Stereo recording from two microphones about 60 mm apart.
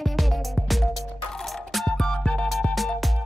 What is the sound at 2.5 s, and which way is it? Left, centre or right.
Music, centre.